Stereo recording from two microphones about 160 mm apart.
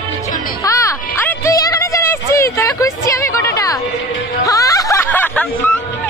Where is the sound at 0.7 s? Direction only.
20° left (ahead or behind).